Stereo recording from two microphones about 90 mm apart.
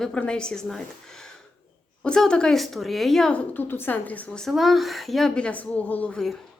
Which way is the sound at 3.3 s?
20° left (ahead or behind).